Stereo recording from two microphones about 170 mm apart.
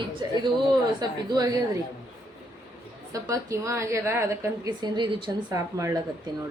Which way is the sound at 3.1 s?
20° right (ahead or behind).